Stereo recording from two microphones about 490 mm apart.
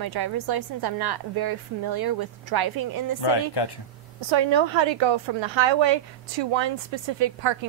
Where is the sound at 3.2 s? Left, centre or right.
Left.